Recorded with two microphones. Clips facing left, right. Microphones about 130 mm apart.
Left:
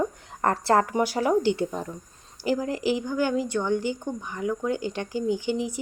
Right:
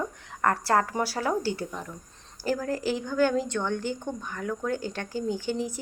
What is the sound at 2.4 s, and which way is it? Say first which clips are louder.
Speech: left 3 dB; 15° left (ahead or behind).